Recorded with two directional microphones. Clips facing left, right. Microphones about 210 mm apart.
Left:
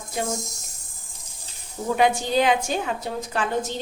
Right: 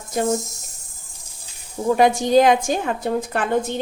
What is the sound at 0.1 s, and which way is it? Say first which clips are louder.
Speech: right 7 dB; 40° right (ahead or behind).